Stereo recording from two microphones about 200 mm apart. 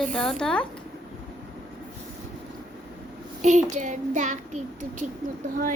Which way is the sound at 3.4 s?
35° right (ahead or behind).